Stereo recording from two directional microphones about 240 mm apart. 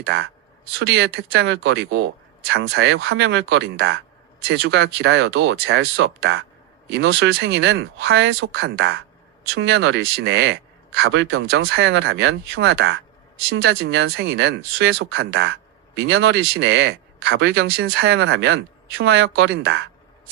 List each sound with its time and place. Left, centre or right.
0.0 s speech: right